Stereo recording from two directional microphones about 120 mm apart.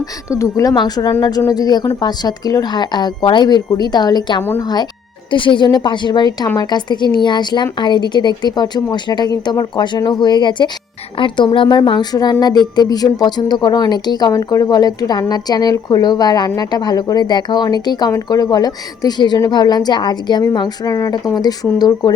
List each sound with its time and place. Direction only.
0.3 s a woman's voice: 25° left (ahead or behind)